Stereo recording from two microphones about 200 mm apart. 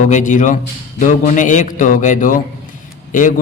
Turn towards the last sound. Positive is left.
turn(degrees=40)  # may be behind; listen again after turning